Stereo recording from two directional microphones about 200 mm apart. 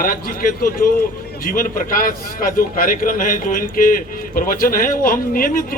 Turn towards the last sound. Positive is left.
turn(degrees=45)  # may be behind; listen again after turning